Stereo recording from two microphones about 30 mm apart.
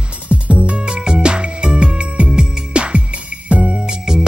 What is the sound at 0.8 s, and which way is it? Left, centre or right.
Music, right.